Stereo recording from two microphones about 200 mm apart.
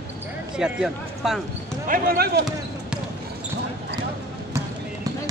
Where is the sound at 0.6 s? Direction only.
Centre (ahead or behind).